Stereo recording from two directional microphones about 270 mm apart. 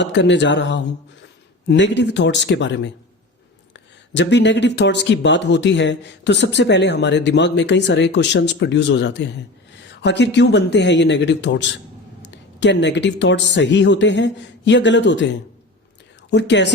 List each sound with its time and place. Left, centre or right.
0.0 s speech: left
4.1 s speech: left